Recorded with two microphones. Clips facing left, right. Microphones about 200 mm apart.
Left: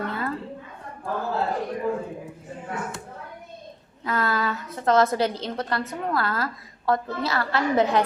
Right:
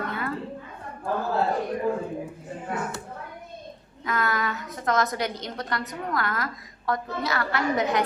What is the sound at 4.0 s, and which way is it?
A woman's voice, 30° left (ahead or behind).